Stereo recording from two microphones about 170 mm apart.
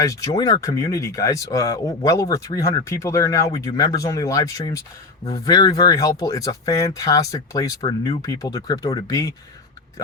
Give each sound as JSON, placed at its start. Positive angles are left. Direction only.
{"t": 0.0, "sound": "speech", "side_deg": 20}